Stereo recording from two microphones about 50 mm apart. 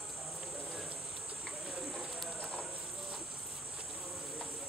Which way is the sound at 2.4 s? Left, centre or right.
Right.